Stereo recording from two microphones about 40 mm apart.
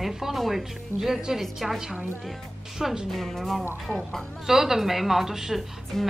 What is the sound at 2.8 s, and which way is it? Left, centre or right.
Speech, centre.